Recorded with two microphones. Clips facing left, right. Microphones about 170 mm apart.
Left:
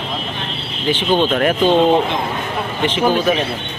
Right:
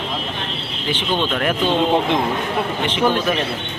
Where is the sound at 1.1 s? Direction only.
45° left (ahead or behind).